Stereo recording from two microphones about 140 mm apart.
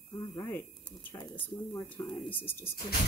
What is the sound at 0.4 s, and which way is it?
Speech, 15° left (ahead or behind).